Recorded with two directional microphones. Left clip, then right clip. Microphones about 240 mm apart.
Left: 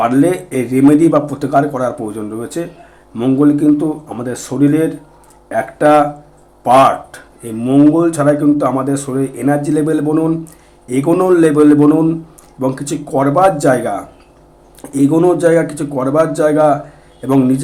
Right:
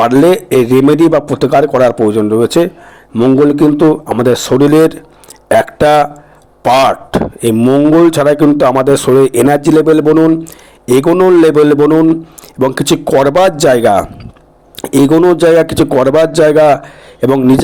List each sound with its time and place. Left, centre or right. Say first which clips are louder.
0.0 s speech: right 5 dB; right